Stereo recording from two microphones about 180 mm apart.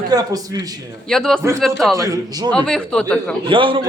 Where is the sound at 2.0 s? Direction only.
20° right (ahead or behind).